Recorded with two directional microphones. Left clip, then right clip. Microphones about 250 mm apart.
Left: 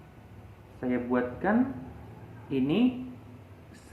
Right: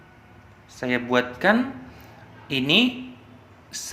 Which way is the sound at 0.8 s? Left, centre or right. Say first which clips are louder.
Right 7 dB; right.